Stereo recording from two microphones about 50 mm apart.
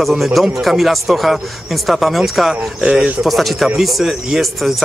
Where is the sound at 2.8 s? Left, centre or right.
Right.